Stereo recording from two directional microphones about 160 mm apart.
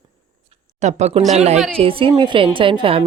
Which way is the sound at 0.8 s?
45° right (ahead or behind).